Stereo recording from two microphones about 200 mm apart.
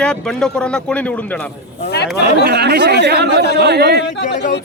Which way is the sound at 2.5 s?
55° right (ahead or behind).